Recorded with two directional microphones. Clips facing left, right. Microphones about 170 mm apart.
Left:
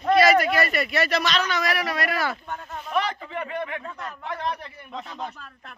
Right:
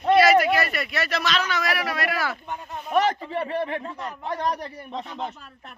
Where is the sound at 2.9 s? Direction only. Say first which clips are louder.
Right 5 dB; 45° right (ahead or behind).